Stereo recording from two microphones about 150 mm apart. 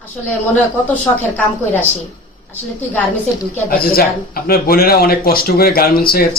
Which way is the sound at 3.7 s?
80° left.